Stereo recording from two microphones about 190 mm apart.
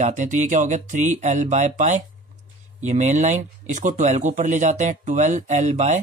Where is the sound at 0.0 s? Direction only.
40° right (ahead or behind).